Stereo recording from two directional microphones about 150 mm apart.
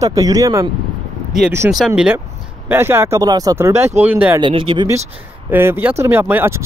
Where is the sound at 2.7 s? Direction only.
15° right (ahead or behind).